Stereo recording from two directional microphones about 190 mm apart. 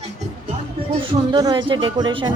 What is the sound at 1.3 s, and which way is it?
Speech, 20° right (ahead or behind).